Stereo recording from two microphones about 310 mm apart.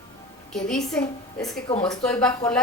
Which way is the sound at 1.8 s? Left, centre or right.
Centre.